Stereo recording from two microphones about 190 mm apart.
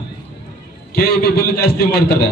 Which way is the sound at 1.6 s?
55° left (ahead or behind).